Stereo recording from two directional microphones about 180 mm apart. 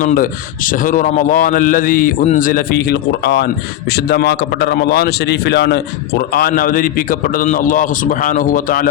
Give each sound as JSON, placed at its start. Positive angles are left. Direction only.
{"t": 0.0, "sound": "a man's voice", "side_deg": 50}